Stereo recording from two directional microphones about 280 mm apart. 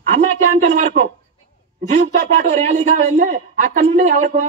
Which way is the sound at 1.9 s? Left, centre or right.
Right.